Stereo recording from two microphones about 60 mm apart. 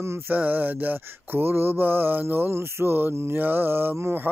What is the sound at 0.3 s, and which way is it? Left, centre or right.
Mantra, right.